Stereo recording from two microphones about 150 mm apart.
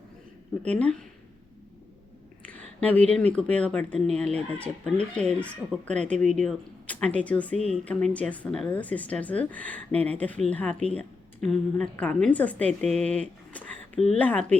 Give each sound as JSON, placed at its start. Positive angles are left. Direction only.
{"t": 0.8, "sound": "a woman's voice", "side_deg": 10}
{"t": 2.5, "sound": "a sound", "side_deg": 10}
{"t": 3.2, "sound": "a woman's voice", "side_deg": 10}
{"t": 7.5, "sound": "speech", "side_deg": -45}
{"t": 7.9, "sound": "a woman's voice", "side_deg": 10}